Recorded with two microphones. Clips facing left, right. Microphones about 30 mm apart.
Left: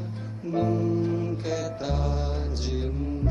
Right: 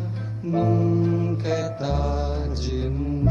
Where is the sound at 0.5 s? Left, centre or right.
Centre.